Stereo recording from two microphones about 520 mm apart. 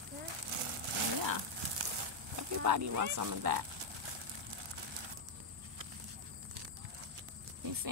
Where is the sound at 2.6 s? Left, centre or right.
Right.